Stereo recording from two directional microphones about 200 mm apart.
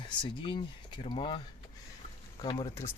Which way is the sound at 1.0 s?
25° left (ahead or behind).